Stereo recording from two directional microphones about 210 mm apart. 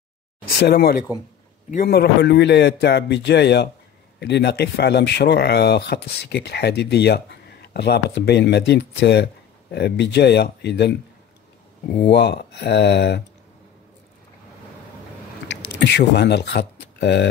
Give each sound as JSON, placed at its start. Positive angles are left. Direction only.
{"t": 0.6, "sound": "speech", "side_deg": 50}
{"t": 12.1, "sound": "speech", "side_deg": 50}
{"t": 15.4, "sound": "speech", "side_deg": 55}